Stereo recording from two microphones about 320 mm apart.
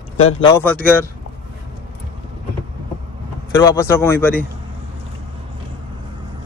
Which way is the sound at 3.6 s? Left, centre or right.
Centre.